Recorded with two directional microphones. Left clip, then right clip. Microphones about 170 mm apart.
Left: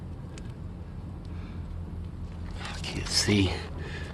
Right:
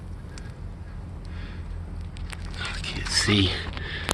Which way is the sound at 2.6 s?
15° right (ahead or behind).